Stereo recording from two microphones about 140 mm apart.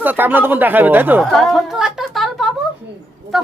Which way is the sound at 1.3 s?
Centre (ahead or behind).